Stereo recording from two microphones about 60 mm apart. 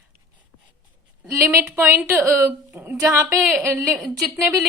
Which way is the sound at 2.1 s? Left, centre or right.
Right.